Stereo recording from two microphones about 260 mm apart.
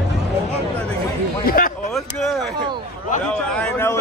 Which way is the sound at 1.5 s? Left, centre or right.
Left.